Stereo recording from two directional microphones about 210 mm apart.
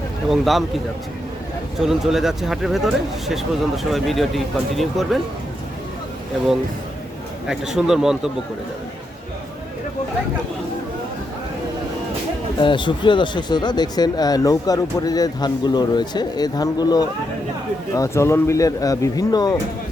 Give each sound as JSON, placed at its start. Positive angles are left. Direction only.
{"t": 0.3, "sound": "speech", "side_deg": 0}
{"t": 1.8, "sound": "speech", "side_deg": 0}
{"t": 7.4, "sound": "speech", "side_deg": 0}
{"t": 12.5, "sound": "speech", "side_deg": 20}